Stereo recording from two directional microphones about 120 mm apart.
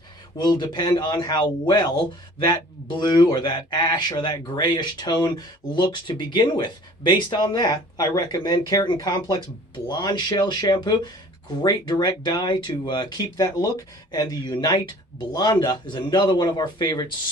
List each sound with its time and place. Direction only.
0.3 s speech: 35° left (ahead or behind)